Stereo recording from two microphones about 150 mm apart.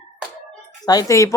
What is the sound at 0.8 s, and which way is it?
Speech, 25° left (ahead or behind).